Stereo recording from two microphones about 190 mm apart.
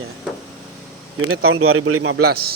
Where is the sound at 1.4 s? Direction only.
90° right.